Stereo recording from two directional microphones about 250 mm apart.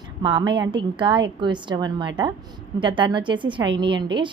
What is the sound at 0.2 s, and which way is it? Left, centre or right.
A woman's voice, centre.